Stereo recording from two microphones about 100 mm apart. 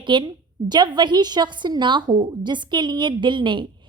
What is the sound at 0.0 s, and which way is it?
A woman's voice, 50° right (ahead or behind).